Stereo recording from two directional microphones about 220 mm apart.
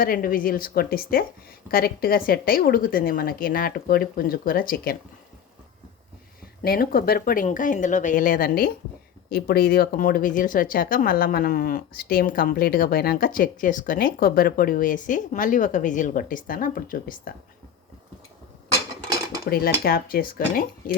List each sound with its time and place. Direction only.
0.0 s speech: 40° left (ahead or behind)
6.6 s speech: 45° left (ahead or behind)
19.0 s dishes: 15° right (ahead or behind)
19.5 s speech: 45° left (ahead or behind)